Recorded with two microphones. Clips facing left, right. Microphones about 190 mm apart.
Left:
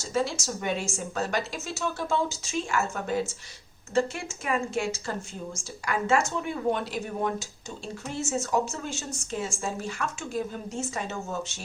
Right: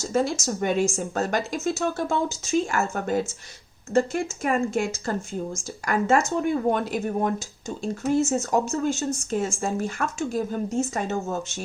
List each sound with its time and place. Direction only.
0.1 s speech: 50° right (ahead or behind)